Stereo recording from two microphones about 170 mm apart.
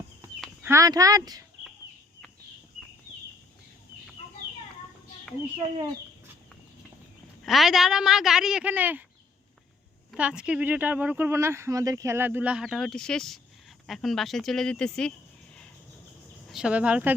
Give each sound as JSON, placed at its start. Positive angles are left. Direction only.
{"t": 0.6, "sound": "speech", "side_deg": -15}
{"t": 7.4, "sound": "speech", "side_deg": 0}
{"t": 10.1, "sound": "speech", "side_deg": -5}
{"t": 16.5, "sound": "speech", "side_deg": -5}